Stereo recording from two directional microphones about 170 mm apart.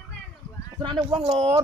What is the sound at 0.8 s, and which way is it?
Speech, 30° right (ahead or behind).